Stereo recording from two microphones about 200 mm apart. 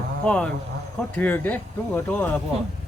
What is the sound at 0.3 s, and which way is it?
Speech, 5° left (ahead or behind).